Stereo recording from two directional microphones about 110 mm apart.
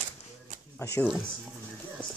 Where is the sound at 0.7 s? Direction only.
25° left (ahead or behind).